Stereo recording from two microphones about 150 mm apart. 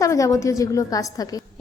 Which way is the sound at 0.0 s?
20° left (ahead or behind).